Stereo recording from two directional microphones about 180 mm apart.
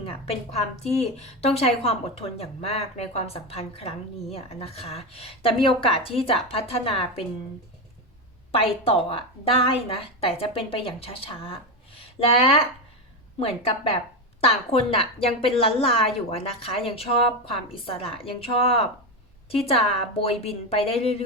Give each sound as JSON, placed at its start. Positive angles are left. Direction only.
{"t": 0.0, "sound": "a woman's voice", "side_deg": 30}
{"t": 8.5, "sound": "a woman's voice", "side_deg": 30}